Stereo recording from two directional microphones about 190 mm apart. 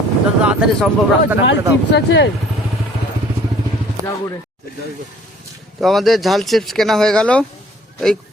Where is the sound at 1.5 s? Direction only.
65° left (ahead or behind).